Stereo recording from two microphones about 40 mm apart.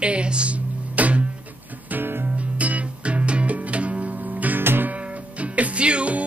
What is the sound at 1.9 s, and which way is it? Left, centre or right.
Music, right.